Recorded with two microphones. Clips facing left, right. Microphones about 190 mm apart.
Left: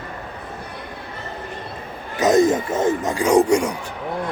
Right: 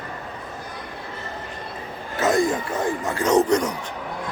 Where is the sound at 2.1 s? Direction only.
20° left (ahead or behind).